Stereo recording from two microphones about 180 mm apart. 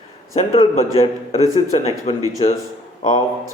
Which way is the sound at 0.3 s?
35° left (ahead or behind).